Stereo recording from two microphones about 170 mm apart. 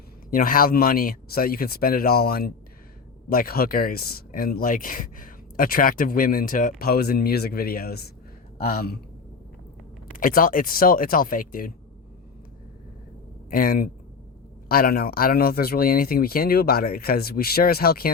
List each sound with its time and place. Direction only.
0.3 s speech: 55° left (ahead or behind)
10.1 s speech: 55° left (ahead or behind)
13.5 s speech: 55° left (ahead or behind)